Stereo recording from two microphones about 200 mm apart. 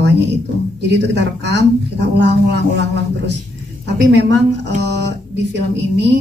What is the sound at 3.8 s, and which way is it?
Speech, 60° right (ahead or behind).